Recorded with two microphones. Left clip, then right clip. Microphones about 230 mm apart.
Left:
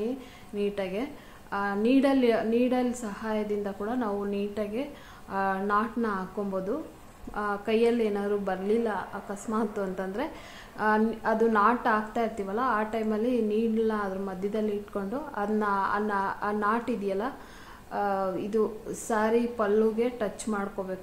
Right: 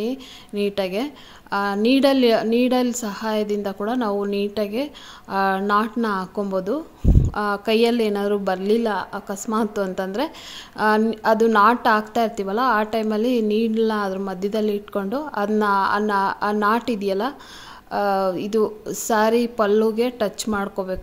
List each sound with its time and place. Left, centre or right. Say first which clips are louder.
0.6 s a woman's voice: right 7 dB; right